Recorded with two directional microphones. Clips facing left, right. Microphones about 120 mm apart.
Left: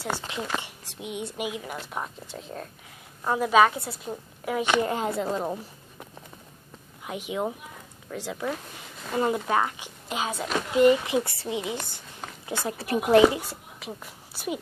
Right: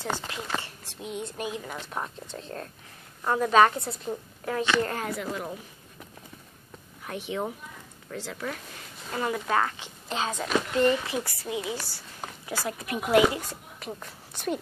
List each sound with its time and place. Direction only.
0.3 s a woman's voice: 15° left (ahead or behind)
7.1 s a woman's voice: 15° left (ahead or behind); by 13.4 s 30° left (ahead or behind)
13.4 s a woman's voice: 10° left (ahead or behind)